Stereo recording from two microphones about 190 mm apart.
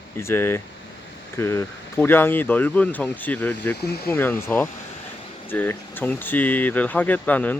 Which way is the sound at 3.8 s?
55° left (ahead or behind).